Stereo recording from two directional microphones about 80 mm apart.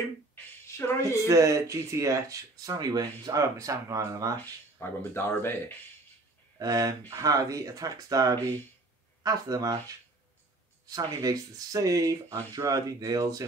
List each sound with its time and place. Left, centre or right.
0.7 s speech: left
1.2 s speech: right
4.7 s speech: left
6.6 s speech: right
11.1 s speech: right